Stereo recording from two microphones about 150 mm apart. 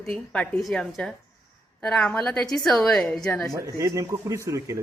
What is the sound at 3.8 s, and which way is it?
A man's voice, 20° right (ahead or behind).